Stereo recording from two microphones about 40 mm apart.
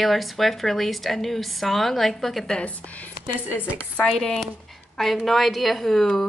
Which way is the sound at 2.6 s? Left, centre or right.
Left.